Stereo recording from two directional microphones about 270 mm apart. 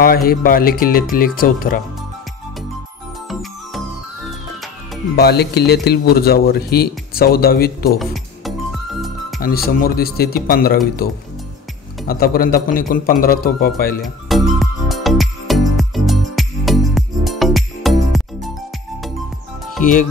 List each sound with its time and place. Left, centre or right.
0.0 s speech: left
5.1 s speech: left
8.0 s music: centre
9.4 s speech: left
14.0 s music: centre
19.8 s speech: left